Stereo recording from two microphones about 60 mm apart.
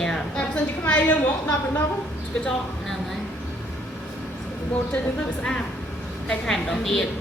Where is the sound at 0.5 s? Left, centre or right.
Left.